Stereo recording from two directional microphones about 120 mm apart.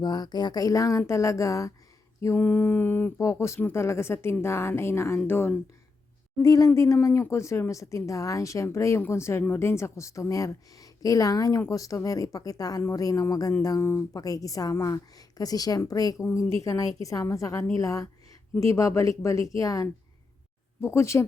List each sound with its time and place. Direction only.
0.0 s speech: 35° left (ahead or behind)
2.2 s mantra: 15° left (ahead or behind)
3.2 s speech: 25° left (ahead or behind)
6.4 s speech: 30° left (ahead or behind)
13.8 s speech: 20° left (ahead or behind)